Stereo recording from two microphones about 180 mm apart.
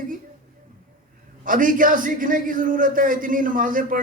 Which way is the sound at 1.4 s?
50° right (ahead or behind).